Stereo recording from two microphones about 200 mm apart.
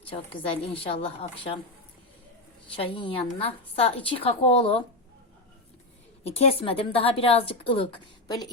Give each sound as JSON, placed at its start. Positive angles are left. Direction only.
{"t": 0.0, "sound": "a woman's voice", "side_deg": 30}
{"t": 2.7, "sound": "a woman's voice", "side_deg": 25}
{"t": 6.2, "sound": "a woman's voice", "side_deg": 30}